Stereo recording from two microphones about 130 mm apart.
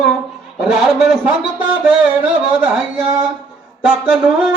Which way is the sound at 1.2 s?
10° right (ahead or behind).